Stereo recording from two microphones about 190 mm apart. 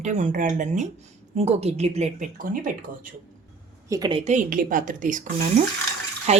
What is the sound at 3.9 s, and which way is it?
Speech, 20° right (ahead or behind).